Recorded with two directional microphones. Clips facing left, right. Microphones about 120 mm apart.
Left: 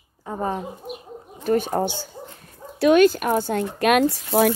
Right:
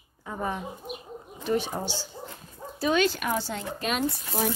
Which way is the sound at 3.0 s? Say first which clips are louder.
Left 9 dB; 50° left (ahead or behind).